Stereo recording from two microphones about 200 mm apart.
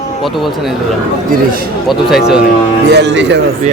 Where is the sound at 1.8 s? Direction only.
Centre (ahead or behind).